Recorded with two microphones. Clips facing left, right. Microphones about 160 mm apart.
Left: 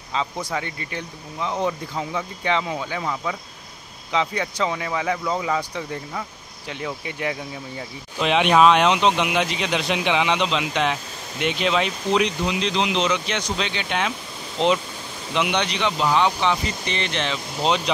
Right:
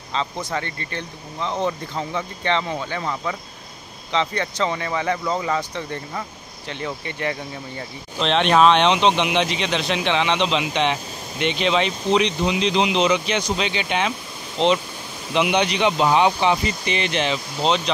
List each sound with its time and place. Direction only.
0.1 s speech: 5° left (ahead or behind)
15.3 s speech: 5° right (ahead or behind)
16.0 s speech: 20° right (ahead or behind)
16.4 s speech: 5° right (ahead or behind)
17.6 s speech: 10° left (ahead or behind)